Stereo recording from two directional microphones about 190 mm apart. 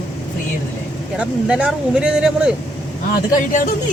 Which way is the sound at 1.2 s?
5° right (ahead or behind).